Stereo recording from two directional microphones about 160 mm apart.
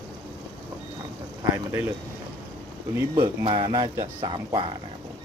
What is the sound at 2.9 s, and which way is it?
Speech, 20° right (ahead or behind).